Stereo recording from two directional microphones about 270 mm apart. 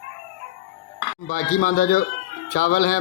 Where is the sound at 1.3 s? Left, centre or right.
Left.